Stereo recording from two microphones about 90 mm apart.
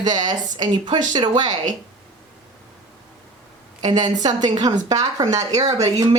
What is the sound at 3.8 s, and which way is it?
A woman's voice, 50° right (ahead or behind).